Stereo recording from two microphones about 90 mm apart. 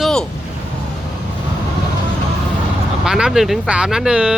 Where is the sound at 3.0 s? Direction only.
5° right (ahead or behind).